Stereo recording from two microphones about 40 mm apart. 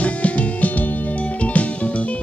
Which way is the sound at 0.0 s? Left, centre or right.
Left.